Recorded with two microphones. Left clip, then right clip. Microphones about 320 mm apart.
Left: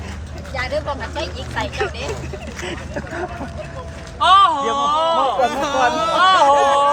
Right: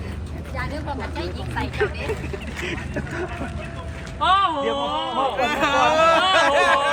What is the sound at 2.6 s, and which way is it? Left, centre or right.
Speech, left.